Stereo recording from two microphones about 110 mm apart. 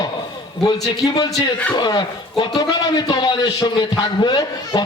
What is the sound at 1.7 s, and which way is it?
A man's voice, 40° left (ahead or behind).